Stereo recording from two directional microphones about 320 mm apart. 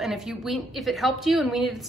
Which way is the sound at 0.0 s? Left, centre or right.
Centre.